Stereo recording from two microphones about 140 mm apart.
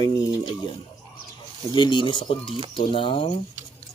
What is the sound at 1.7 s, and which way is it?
Speech, 35° left (ahead or behind).